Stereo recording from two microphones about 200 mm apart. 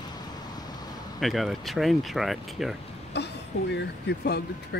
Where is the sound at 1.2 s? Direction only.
Centre (ahead or behind).